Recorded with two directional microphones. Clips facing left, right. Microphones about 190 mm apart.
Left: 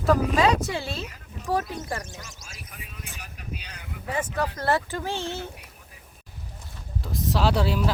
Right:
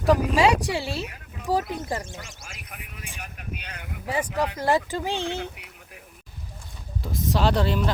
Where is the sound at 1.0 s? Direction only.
60° right (ahead or behind).